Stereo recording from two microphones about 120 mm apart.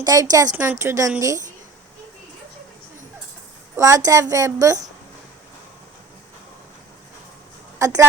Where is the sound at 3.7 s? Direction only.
25° right (ahead or behind).